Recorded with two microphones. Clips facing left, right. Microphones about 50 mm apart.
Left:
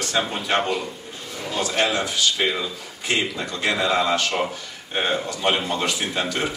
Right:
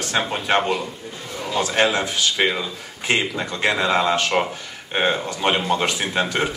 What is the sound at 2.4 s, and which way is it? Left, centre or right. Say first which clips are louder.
Speech: right 4 dB; right.